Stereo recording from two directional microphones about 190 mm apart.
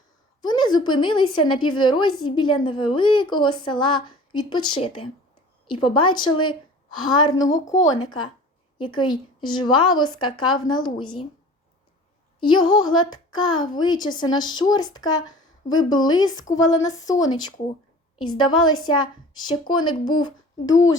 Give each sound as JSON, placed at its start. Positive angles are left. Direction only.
{"t": 0.4, "sound": "a woman's voice", "side_deg": 25}
{"t": 12.4, "sound": "a woman's voice", "side_deg": 25}
{"t": 12.8, "sound": "music", "side_deg": 90}
{"t": 13.1, "sound": "a woman's voice", "side_deg": 20}
{"t": 15.0, "sound": "a woman's voice", "side_deg": 90}
{"t": 15.8, "sound": "a woman's voice", "side_deg": 20}